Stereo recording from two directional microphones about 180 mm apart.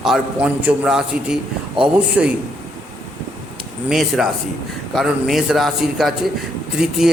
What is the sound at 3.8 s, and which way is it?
A man's voice, 5° right (ahead or behind).